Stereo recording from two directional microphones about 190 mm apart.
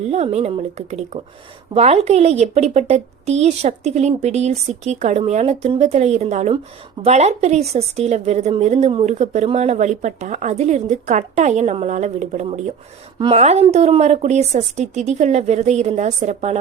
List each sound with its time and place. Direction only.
0.0 s speech: 35° right (ahead or behind)
13.1 s a woman's voice: 25° right (ahead or behind)